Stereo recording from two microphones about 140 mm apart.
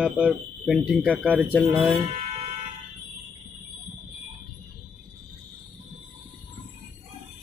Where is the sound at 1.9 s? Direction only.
45° right (ahead or behind).